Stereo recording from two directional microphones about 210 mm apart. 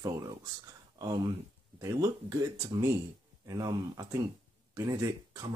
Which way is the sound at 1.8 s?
15° right (ahead or behind).